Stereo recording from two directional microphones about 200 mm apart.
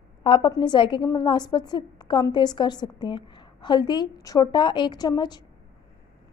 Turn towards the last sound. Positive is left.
turn(degrees=20)  # may be behind; listen again after turning